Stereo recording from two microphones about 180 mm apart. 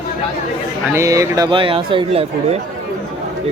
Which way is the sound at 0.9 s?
20° right (ahead or behind).